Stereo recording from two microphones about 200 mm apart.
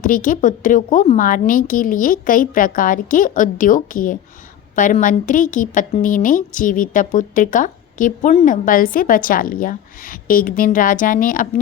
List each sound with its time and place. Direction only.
0.0 s a woman's voice: 40° left (ahead or behind)